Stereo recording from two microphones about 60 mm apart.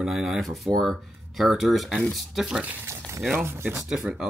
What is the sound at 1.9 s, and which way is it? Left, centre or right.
Speech, centre.